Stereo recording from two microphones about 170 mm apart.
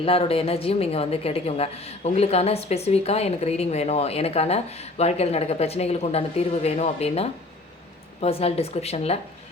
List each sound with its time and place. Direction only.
0.0 s a woman's voice: 35° left (ahead or behind)